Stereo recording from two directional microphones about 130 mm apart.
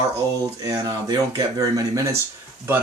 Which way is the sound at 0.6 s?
25° right (ahead or behind).